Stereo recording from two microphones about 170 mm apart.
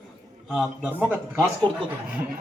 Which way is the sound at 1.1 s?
15° right (ahead or behind).